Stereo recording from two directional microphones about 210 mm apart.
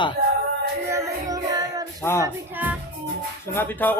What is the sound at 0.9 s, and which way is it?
Music, 15° right (ahead or behind).